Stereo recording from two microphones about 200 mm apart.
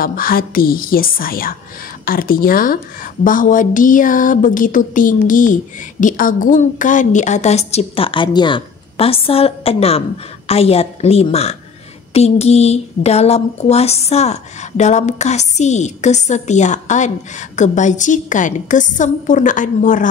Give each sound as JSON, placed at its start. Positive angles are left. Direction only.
{"t": 0.0, "sound": "a woman's voice", "side_deg": 45}